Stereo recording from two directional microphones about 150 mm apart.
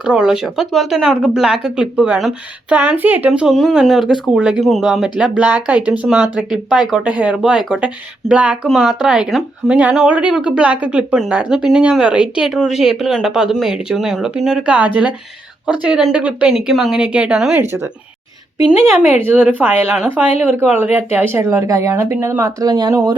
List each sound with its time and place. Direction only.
0.0 s speech: 5° right (ahead or behind)
19.2 s speech: 10° right (ahead or behind)